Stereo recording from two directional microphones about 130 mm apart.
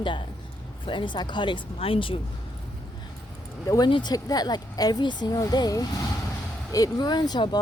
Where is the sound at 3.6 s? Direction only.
25° left (ahead or behind).